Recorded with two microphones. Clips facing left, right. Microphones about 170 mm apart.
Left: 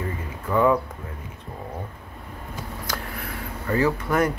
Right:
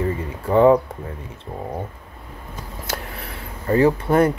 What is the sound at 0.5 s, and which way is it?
Speech, 30° right (ahead or behind).